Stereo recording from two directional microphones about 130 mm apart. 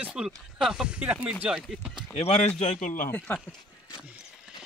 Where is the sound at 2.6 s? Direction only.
70° left (ahead or behind).